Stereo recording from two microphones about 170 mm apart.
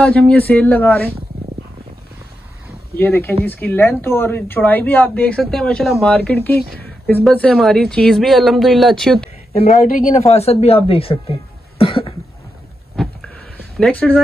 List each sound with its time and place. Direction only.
0.0 s speech: 5° left (ahead or behind)
3.0 s a woman's voice: 10° left (ahead or behind)
9.5 s speech: 35° left (ahead or behind)
9.8 s speech: 50° left (ahead or behind)
10.2 s speech: 40° left (ahead or behind)
11.8 s cough: 35° left (ahead or behind)
13.0 s a sound: centre (ahead or behind)
13.7 s a woman's voice: 5° left (ahead or behind)